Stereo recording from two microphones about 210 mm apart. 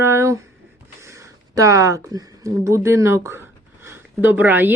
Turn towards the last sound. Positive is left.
turn(degrees=-10)  # may be behind; listen again after turning